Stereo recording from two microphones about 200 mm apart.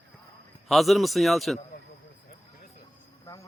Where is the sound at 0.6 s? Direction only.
Centre (ahead or behind).